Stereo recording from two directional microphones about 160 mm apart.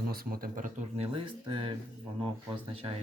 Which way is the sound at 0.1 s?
65° right (ahead or behind).